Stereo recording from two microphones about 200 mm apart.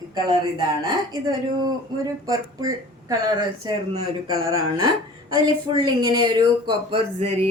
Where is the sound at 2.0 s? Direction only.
15° right (ahead or behind).